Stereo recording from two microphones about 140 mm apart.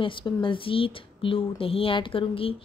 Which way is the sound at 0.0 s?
35° left (ahead or behind).